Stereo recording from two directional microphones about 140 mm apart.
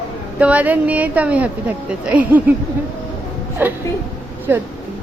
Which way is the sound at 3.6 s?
15° right (ahead or behind).